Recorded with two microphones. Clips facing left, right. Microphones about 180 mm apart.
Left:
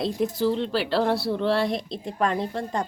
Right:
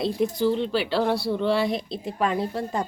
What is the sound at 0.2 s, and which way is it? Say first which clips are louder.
A woman's voice: right 1 dB; centre (ahead or behind).